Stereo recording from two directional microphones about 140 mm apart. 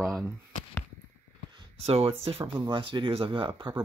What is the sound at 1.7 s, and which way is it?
Speech, 45° right (ahead or behind).